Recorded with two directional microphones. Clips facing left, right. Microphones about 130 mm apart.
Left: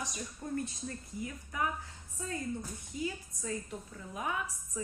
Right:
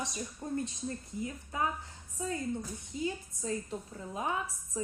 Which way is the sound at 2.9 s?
25° right (ahead or behind).